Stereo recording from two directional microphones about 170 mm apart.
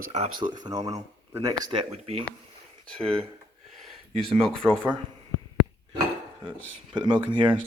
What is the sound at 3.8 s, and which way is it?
Speech, centre (ahead or behind).